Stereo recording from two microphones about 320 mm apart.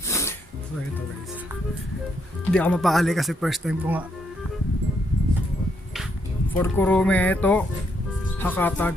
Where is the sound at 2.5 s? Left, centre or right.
Centre.